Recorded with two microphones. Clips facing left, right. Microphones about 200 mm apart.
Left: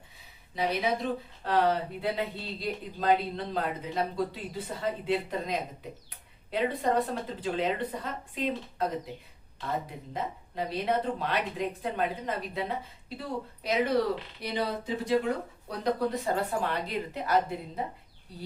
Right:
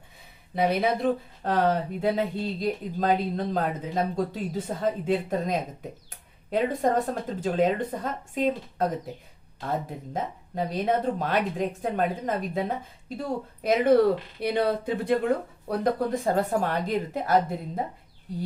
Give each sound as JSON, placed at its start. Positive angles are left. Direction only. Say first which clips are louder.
{"t": 0.5, "sound": "speech", "louder": "right 5 dB", "side_deg": -55}
{"t": 10.1, "sound": "speech", "louder": "right 3 dB", "side_deg": -45}